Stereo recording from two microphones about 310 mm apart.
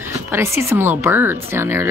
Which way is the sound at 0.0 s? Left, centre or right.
Centre.